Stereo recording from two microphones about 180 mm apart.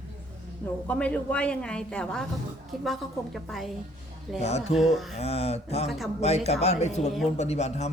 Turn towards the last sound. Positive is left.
turn(degrees=40)  # may be behind; listen again after turning